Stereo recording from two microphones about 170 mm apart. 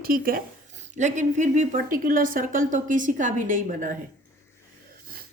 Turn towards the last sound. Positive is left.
turn(degrees=-50)  # may be behind; listen again after turning